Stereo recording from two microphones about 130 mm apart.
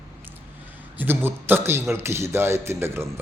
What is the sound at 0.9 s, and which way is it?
A man's voice, 15° right (ahead or behind).